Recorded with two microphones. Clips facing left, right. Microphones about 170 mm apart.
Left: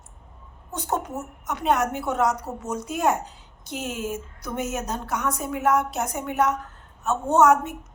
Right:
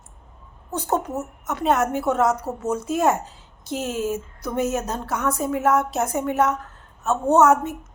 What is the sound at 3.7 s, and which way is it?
Speech, 40° right (ahead or behind).